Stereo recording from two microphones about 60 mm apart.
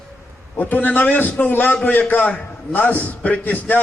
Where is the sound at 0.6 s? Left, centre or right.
Left.